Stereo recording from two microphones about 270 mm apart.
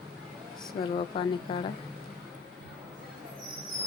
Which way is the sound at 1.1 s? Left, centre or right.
Centre.